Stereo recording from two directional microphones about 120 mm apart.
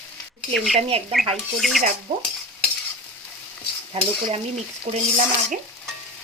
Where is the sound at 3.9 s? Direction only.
55° right (ahead or behind).